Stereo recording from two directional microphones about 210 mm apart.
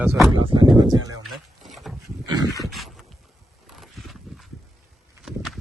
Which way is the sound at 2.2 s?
20° right (ahead or behind).